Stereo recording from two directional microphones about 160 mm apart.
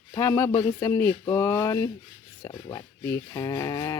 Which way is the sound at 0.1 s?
20° left (ahead or behind).